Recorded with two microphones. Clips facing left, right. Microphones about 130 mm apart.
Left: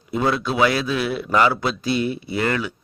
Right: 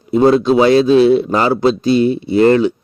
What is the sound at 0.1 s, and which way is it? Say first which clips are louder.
A man's voice: right 11 dB; 35° right (ahead or behind).